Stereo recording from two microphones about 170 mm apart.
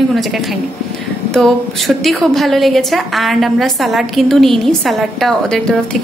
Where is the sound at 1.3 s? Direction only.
Centre (ahead or behind).